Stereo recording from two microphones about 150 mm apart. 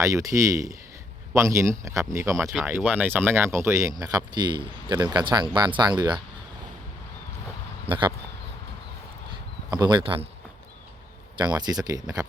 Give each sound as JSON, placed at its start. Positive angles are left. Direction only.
{"t": 0.0, "sound": "speech", "side_deg": -20}
{"t": 7.9, "sound": "speech", "side_deg": -35}
{"t": 9.6, "sound": "speech", "side_deg": -30}
{"t": 11.3, "sound": "speech", "side_deg": -30}